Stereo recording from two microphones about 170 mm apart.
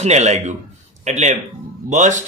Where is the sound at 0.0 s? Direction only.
40° right (ahead or behind).